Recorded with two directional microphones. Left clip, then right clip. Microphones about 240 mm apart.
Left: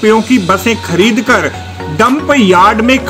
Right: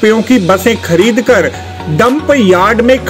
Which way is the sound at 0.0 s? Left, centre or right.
Centre.